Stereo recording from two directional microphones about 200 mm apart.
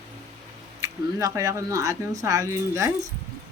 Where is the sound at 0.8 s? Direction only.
15° right (ahead or behind).